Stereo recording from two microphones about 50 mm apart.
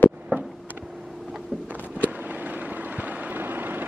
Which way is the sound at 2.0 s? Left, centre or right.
Right.